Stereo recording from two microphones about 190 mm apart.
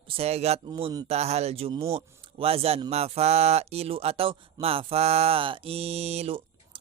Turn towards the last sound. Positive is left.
turn(degrees=-30)  # may be behind; listen again after turning